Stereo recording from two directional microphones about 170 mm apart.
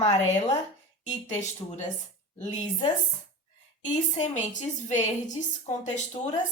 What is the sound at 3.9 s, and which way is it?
A woman's voice, 45° left (ahead or behind).